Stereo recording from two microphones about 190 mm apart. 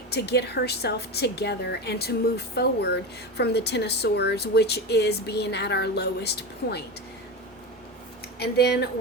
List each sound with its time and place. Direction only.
0.1 s a woman's voice: 60° left (ahead or behind)
8.4 s a woman's voice: 55° left (ahead or behind)